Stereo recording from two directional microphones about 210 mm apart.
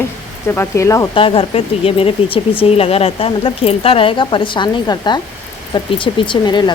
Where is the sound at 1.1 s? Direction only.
25° left (ahead or behind).